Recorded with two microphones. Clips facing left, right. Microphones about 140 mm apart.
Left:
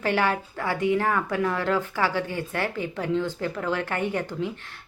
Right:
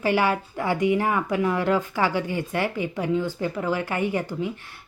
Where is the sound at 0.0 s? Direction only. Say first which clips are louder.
Right 2 dB; 10° right (ahead or behind).